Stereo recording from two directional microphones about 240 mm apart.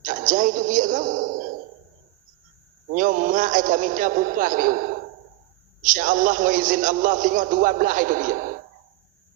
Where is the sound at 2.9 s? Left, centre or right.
Right.